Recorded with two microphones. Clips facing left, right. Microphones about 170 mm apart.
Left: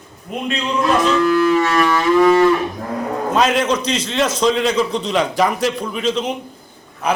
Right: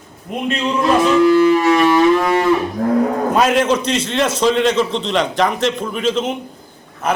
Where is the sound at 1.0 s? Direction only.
15° right (ahead or behind).